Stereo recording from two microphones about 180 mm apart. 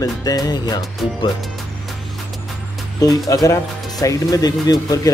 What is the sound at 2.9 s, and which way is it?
Speech, 20° left (ahead or behind).